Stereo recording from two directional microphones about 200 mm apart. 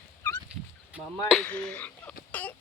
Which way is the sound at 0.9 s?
Centre (ahead or behind).